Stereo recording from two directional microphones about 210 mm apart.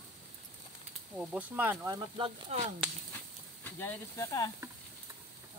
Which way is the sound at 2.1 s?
25° right (ahead or behind).